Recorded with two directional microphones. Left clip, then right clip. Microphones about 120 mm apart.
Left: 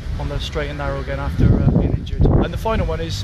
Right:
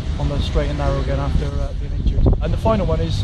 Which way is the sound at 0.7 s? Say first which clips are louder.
Right 2 dB; 25° left (ahead or behind).